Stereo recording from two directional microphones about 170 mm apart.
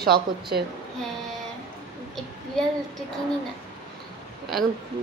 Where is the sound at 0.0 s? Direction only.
65° right (ahead or behind).